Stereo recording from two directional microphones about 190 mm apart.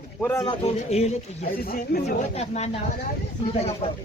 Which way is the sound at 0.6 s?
35° left (ahead or behind).